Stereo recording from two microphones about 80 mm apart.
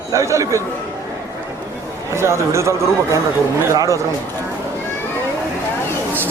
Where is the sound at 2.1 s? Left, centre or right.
Right.